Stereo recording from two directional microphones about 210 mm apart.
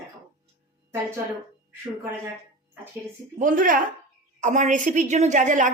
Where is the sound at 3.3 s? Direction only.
40° right (ahead or behind).